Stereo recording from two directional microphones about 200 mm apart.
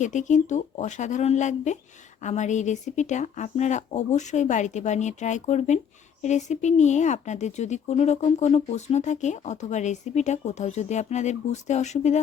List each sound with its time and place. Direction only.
0.0 s speech: 40° left (ahead or behind)